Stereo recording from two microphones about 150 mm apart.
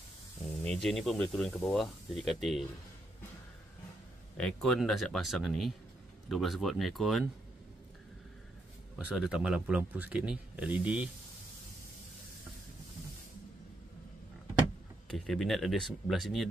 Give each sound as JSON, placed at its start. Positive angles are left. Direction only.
{"t": 0.7, "sound": "speech", "side_deg": 0}
{"t": 4.4, "sound": "speech", "side_deg": 5}
{"t": 8.9, "sound": "speech", "side_deg": -5}
{"t": 15.0, "sound": "speech", "side_deg": 0}